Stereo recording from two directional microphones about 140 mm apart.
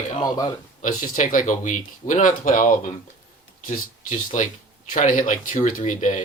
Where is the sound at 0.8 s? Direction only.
65° left (ahead or behind).